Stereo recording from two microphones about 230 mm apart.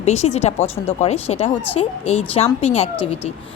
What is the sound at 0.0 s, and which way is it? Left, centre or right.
Speech, left.